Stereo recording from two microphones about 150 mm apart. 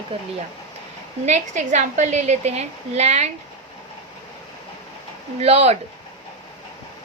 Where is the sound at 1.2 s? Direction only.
50° right (ahead or behind).